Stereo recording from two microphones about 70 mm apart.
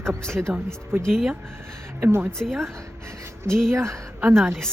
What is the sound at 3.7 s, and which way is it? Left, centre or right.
Speech, right.